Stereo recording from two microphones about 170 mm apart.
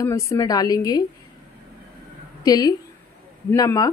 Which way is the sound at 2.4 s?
20° left (ahead or behind).